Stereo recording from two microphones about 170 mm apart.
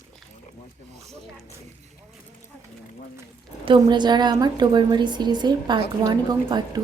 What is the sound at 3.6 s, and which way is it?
A woman's voice, 30° right (ahead or behind).